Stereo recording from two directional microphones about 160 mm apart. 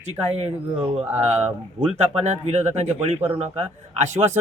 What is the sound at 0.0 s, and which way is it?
A man's voice, 40° right (ahead or behind).